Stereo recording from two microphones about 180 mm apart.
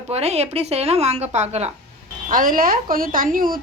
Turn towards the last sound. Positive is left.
turn(degrees=-50)  # may be behind; listen again after turning